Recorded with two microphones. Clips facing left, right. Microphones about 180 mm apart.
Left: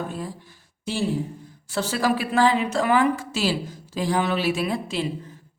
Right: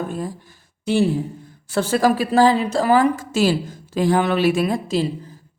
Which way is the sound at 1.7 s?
50° right (ahead or behind).